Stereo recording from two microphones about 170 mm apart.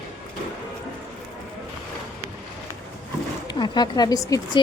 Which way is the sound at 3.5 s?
25° left (ahead or behind).